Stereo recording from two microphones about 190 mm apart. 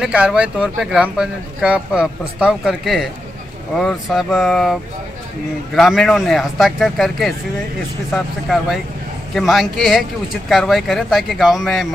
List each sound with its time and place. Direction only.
0.0 s speech: 5° right (ahead or behind)
5.8 s speech: centre (ahead or behind)